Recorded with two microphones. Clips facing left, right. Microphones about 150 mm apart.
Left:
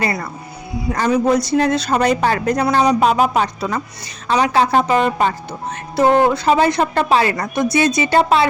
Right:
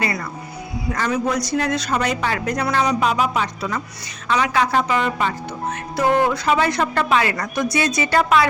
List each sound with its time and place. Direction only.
0.0 s a woman's voice: 35° left (ahead or behind)